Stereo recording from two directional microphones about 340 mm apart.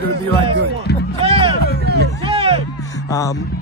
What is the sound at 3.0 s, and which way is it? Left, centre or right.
Speech, centre.